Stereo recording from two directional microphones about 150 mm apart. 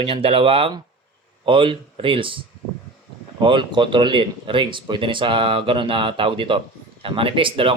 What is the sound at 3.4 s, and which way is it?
Speech, 30° right (ahead or behind).